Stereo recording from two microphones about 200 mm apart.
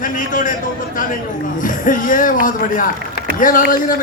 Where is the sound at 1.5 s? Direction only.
40° left (ahead or behind).